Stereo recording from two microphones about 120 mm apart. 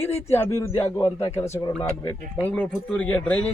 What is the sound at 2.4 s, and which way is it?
A man's voice, 10° left (ahead or behind).